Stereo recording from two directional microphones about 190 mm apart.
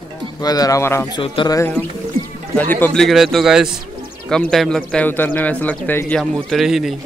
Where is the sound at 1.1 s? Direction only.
25° left (ahead or behind); by 6.9 s centre (ahead or behind).